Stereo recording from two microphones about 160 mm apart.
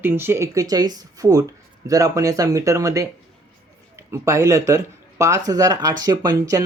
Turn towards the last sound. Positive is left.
turn(degrees=-20)  # may be behind; listen again after turning